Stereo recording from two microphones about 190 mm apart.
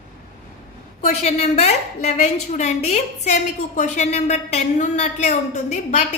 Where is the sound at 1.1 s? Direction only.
35° left (ahead or behind).